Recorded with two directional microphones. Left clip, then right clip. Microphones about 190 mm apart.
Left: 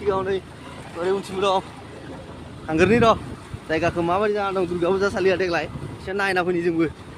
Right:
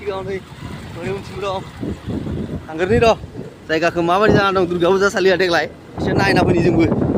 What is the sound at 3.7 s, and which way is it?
Speech, 15° right (ahead or behind).